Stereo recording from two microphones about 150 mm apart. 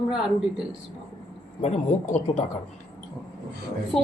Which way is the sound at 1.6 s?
50° left (ahead or behind).